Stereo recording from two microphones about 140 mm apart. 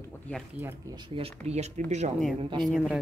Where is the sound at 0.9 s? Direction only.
30° right (ahead or behind).